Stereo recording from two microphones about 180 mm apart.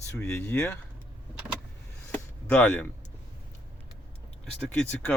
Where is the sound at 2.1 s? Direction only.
10° left (ahead or behind).